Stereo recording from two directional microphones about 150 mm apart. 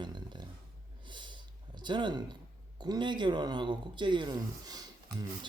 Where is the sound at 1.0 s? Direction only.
30° right (ahead or behind).